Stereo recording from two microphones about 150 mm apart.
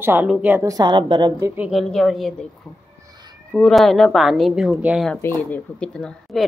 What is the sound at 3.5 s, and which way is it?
A woman's voice, centre (ahead or behind).